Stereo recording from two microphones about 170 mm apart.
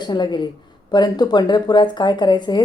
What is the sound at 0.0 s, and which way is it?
Speech, 25° left (ahead or behind).